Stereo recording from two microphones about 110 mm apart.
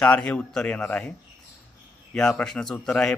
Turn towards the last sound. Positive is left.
turn(degrees=5)  # may be behind; listen again after turning